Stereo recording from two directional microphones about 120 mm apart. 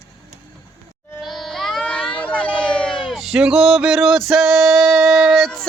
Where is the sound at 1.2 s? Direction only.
Centre (ahead or behind).